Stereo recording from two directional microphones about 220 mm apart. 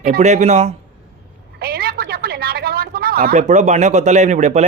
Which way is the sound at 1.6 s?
45° right (ahead or behind).